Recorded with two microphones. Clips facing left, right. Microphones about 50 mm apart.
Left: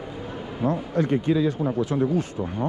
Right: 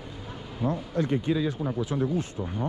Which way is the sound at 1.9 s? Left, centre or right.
Left.